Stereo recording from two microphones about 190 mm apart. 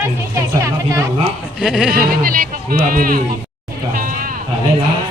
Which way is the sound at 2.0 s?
50° right (ahead or behind).